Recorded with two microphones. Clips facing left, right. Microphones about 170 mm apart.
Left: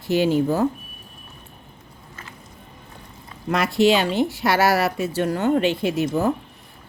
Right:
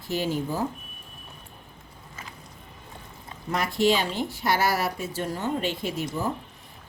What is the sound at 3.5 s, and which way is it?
Speech, 75° left (ahead or behind).